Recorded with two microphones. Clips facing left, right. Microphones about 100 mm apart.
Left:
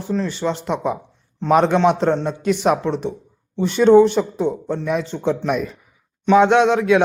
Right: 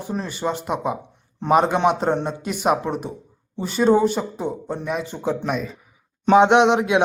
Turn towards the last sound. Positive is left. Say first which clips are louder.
# left 1 dB
turn(degrees=-20)  # may be behind; listen again after turning